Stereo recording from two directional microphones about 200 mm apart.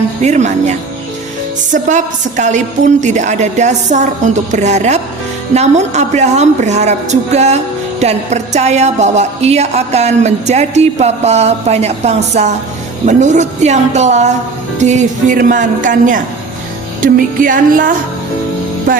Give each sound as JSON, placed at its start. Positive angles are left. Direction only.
{"t": 0.2, "sound": "a woman's voice", "side_deg": -35}
{"t": 1.7, "sound": "a woman's voice", "side_deg": -40}